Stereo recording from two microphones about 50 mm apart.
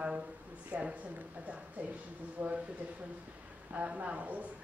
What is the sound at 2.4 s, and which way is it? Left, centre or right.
Speech, right.